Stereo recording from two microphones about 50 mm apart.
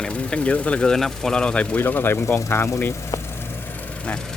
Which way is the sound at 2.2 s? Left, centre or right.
Left.